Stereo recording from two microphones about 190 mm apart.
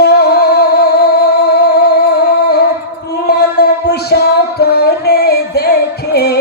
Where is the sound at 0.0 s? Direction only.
60° left (ahead or behind).